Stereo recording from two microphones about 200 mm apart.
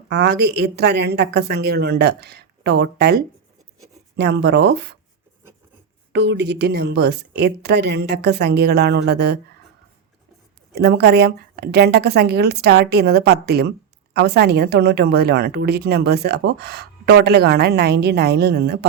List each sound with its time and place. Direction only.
0.1 s a woman's voice: 55° right (ahead or behind)
6.1 s a woman's voice: 60° right (ahead or behind)
10.7 s a woman's voice: 55° right (ahead or behind)